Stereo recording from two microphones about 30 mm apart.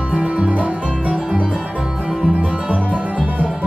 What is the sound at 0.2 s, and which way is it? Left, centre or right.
Music, right.